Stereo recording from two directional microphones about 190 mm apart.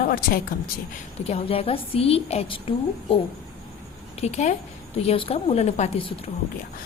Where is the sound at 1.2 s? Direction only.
30° left (ahead or behind).